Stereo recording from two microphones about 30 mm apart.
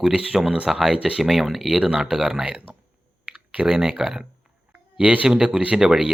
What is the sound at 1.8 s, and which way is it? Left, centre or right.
Speech, right.